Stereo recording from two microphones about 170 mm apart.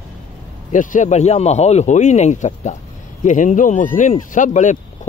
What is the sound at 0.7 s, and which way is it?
Speech, 45° left (ahead or behind).